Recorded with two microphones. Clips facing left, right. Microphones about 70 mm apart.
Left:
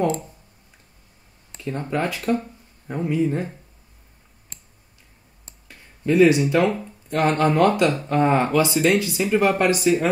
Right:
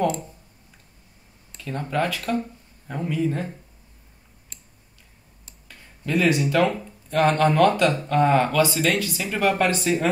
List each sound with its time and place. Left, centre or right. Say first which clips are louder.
1.5 s speech: left 2 dB; centre
5.7 s a sound: left 5 dB; centre
6.6 s speech: left 1 dB; centre